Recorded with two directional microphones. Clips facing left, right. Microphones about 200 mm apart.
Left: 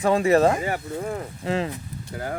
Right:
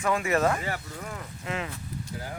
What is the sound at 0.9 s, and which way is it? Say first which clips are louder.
Speech: left 9 dB; 35° left (ahead or behind).